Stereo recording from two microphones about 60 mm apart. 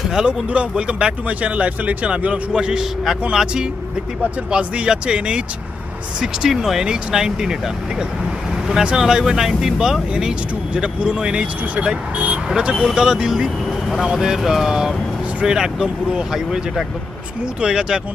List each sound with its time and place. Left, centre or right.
0.1 s speech: centre
8.6 s speech: centre